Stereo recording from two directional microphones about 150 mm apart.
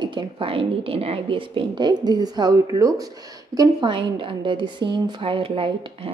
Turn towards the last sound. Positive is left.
turn(degrees=-35)  # may be behind; listen again after turning